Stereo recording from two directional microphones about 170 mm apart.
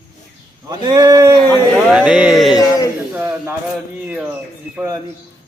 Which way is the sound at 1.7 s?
5° right (ahead or behind).